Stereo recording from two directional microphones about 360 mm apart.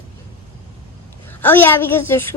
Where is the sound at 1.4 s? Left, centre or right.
Centre.